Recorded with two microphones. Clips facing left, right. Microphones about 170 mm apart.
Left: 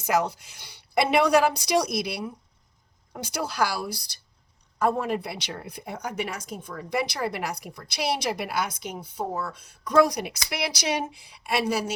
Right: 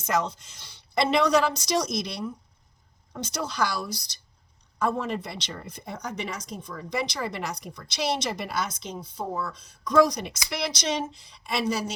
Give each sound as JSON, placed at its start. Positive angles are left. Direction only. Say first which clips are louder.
{"t": 0.0, "sound": "speech", "louder": "left 2 dB", "side_deg": 10}